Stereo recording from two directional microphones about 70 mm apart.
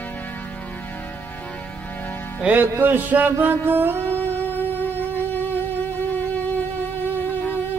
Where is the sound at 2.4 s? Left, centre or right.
Right.